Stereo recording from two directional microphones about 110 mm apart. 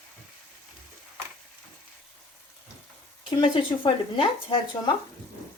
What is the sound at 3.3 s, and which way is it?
A woman's voice, 50° left (ahead or behind).